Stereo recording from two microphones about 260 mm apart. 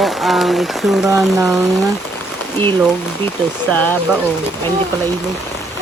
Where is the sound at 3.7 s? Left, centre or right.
Centre.